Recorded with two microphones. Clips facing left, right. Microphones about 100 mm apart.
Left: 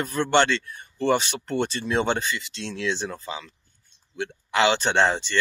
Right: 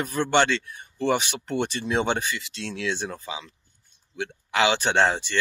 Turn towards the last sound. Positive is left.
turn(degrees=-10)  # may be behind; listen again after turning